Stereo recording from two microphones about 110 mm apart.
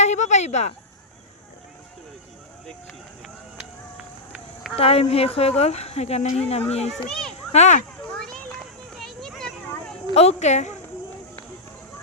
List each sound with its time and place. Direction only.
0.0 s speech: 90° left
4.8 s speech: 65° left (ahead or behind)
7.5 s speech: 90° left
8.2 s a sound: 5° left (ahead or behind)
10.2 s speech: 80° left